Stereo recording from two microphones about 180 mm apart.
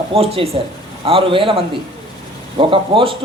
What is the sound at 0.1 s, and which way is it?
A man's voice, 35° right (ahead or behind).